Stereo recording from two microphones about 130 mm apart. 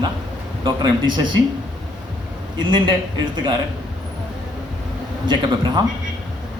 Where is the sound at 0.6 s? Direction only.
35° right (ahead or behind).